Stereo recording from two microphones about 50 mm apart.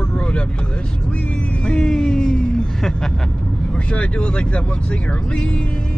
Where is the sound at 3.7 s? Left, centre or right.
Left.